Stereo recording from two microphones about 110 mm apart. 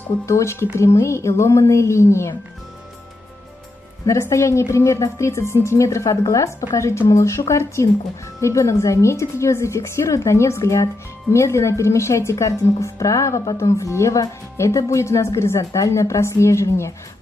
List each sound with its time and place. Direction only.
0.3 s a woman's voice: 25° left (ahead or behind)
4.0 s a woman's voice: 30° left (ahead or behind)